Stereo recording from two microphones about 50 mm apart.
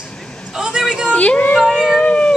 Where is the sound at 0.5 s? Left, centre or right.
Centre.